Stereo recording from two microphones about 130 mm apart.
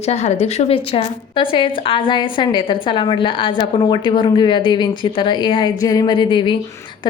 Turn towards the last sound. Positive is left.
turn(degrees=40)  # may be behind; listen again after turning